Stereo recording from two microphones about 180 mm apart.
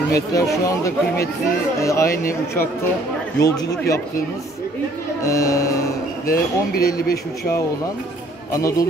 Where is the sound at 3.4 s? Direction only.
20° left (ahead or behind).